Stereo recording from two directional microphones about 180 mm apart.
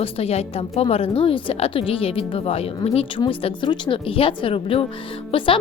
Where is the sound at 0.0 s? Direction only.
30° left (ahead or behind).